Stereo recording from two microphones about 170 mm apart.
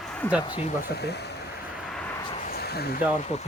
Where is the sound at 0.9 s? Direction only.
75° left (ahead or behind).